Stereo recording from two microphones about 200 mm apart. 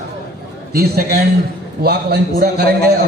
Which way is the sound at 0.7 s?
50° right (ahead or behind).